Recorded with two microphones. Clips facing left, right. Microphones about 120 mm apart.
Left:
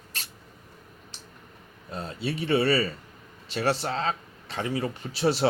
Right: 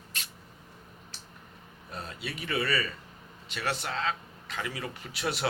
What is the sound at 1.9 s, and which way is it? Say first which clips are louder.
Speech: left 7 dB; 30° left (ahead or behind).